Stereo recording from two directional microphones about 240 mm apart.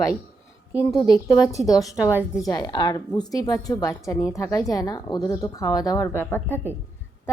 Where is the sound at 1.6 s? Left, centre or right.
Centre.